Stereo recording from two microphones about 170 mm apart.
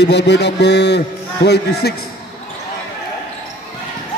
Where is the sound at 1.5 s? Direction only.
75° left (ahead or behind).